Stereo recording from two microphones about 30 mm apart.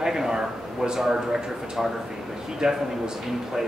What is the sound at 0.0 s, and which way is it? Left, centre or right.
Speech, centre.